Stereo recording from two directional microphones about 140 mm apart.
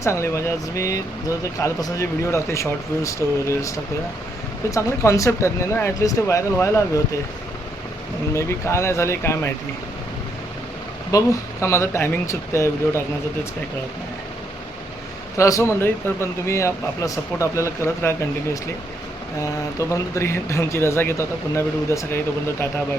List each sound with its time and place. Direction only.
0.0 s speech: 20° left (ahead or behind)
4.7 s speech: 20° left (ahead or behind)
8.3 s speech: 20° left (ahead or behind)
11.1 s speech: 20° left (ahead or behind)
15.4 s speech: 20° left (ahead or behind)
19.4 s speech: 20° left (ahead or behind)